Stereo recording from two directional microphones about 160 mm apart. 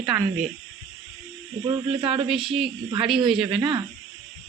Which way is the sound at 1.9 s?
35° right (ahead or behind).